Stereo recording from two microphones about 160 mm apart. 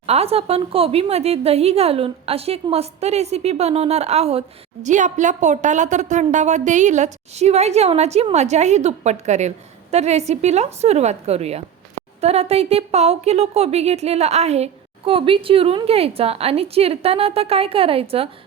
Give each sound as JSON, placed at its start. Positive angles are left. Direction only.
{"t": 0.0, "sound": "a woman's voice", "side_deg": -40}